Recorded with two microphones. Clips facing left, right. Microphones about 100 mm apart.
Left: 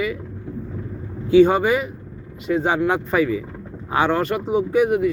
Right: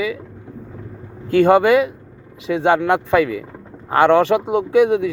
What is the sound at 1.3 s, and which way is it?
Speech, 65° right (ahead or behind).